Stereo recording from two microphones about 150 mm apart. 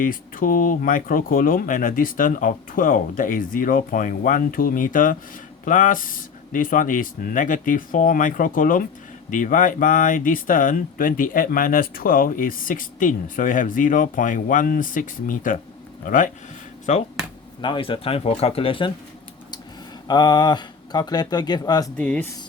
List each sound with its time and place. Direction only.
0.0 s speech: 65° left (ahead or behind)
16.9 s speech: 50° left (ahead or behind)
17.6 s speech: 35° left (ahead or behind)
20.1 s speech: 25° left (ahead or behind)
21.9 s speech: 10° left (ahead or behind)